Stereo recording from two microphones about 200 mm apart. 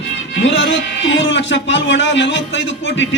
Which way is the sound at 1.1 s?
65° left (ahead or behind).